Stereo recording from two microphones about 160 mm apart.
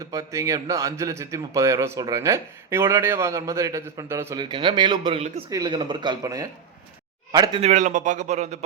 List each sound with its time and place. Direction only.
0.1 s a man's voice: 20° right (ahead or behind)
7.6 s speech: 45° right (ahead or behind)